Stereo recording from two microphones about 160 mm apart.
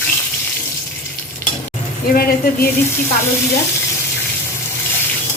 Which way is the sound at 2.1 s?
70° left (ahead or behind).